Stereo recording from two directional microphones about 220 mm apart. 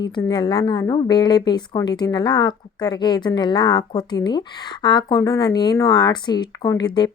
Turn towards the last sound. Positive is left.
turn(degrees=20)  # may be behind; listen again after turning